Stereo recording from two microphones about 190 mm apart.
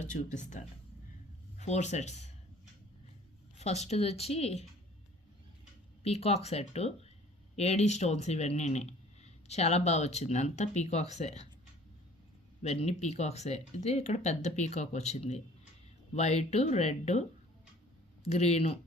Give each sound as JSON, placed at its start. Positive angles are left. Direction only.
{"t": 0.0, "sound": "speech", "side_deg": 40}
{"t": 3.6, "sound": "speech", "side_deg": 35}
{"t": 6.0, "sound": "speech", "side_deg": 35}
{"t": 12.6, "sound": "speech", "side_deg": 35}